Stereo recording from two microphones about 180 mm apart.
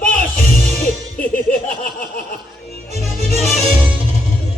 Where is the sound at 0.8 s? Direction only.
50° left (ahead or behind).